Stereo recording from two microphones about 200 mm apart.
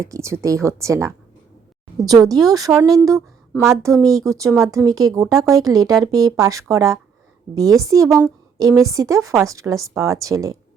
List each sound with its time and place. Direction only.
0.0 s speech: 15° right (ahead or behind)